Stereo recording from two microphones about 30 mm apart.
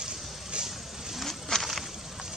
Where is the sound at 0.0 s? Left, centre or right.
Right.